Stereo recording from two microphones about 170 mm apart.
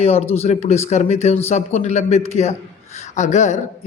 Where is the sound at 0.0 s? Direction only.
35° left (ahead or behind).